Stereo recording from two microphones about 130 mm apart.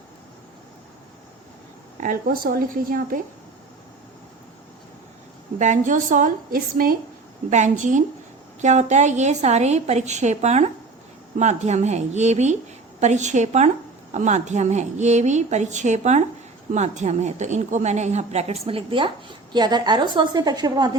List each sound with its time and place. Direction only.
2.0 s a woman's voice: 90° right
5.5 s a woman's voice: 70° right (ahead or behind); by 6.9 s 90° right
7.5 s a woman's voice: 70° right (ahead or behind); by 20.9 s 30° right (ahead or behind)